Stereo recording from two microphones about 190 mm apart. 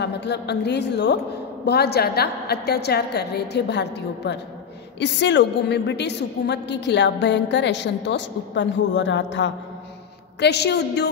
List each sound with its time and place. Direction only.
0.0 s a woman's voice: 60° left (ahead or behind)